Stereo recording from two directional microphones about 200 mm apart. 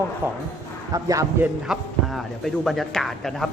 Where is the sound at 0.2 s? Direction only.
10° right (ahead or behind).